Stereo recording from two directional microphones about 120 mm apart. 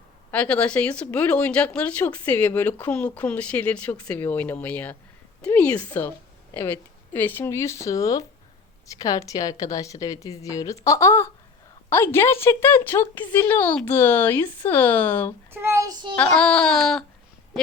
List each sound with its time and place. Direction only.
0.3 s a woman's voice: 10° left (ahead or behind)
15.5 s a child's voice: 20° right (ahead or behind)
16.1 s a woman's voice: 10° left (ahead or behind)